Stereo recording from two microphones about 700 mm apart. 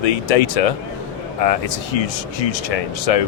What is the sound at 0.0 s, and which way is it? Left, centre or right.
A man's voice, left.